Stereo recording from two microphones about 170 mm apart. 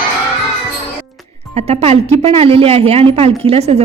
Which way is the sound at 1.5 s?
35° right (ahead or behind).